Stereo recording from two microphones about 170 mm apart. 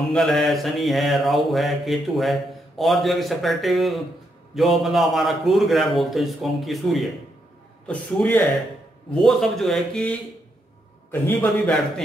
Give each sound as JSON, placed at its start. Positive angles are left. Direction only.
{"t": 0.1, "sound": "a man's voice", "side_deg": 0}